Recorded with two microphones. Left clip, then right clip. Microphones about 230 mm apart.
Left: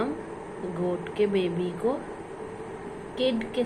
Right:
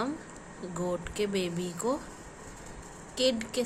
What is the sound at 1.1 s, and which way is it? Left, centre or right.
Speech, right.